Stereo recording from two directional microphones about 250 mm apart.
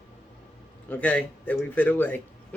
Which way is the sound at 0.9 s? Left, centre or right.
Centre.